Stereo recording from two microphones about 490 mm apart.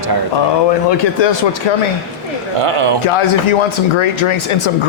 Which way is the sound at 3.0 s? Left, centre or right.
Left.